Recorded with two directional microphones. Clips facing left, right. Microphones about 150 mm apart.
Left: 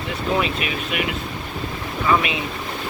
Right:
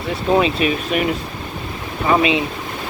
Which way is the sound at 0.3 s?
35° right (ahead or behind).